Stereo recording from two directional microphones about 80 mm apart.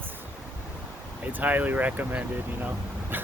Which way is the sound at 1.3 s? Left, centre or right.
Right.